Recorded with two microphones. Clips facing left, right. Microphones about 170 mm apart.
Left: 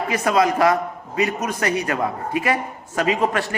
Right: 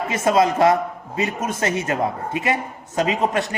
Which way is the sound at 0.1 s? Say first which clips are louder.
Right 1 dB; 25° right (ahead or behind).